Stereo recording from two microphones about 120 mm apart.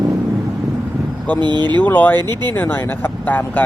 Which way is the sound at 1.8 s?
15° left (ahead or behind).